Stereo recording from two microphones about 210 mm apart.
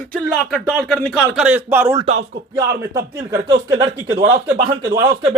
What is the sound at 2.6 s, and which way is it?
A man's voice, 20° right (ahead or behind).